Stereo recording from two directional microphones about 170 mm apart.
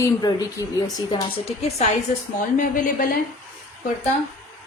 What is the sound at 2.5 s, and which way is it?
Speech, 55° left (ahead or behind).